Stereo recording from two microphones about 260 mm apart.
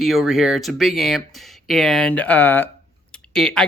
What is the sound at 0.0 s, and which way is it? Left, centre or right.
Speech, centre.